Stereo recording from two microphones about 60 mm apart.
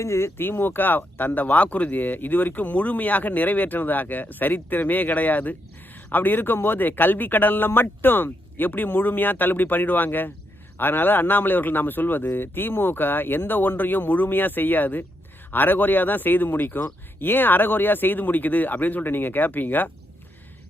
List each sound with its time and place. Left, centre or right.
0.0 s speech: left